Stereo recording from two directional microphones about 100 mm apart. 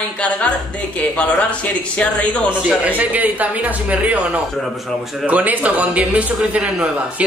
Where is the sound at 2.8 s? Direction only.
15° right (ahead or behind).